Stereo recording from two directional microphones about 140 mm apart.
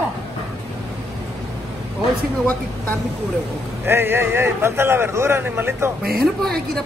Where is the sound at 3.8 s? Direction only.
15° right (ahead or behind).